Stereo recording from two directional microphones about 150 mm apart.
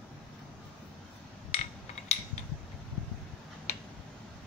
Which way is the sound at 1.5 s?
40° left (ahead or behind).